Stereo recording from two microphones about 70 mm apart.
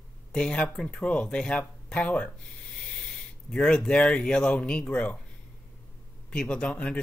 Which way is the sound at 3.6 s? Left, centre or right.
Centre.